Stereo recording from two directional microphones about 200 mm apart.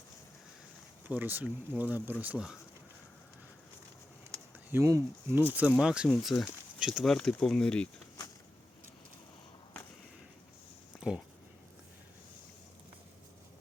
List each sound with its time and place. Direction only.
1.0 s speech: 10° right (ahead or behind)
4.7 s speech: 15° right (ahead or behind); by 8.0 s 5° left (ahead or behind)
10.9 s a sound: centre (ahead or behind)